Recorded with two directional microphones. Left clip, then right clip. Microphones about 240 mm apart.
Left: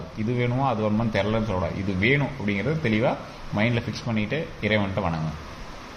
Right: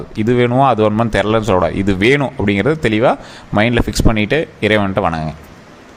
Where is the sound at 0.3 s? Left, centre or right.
Right.